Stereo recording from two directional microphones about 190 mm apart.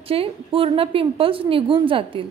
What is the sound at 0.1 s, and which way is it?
A woman's voice, 30° right (ahead or behind).